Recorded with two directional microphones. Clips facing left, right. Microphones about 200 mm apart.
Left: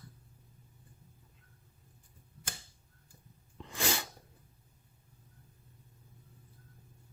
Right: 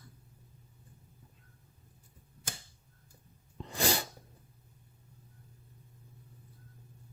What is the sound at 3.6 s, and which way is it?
Sneeze, 35° right (ahead or behind).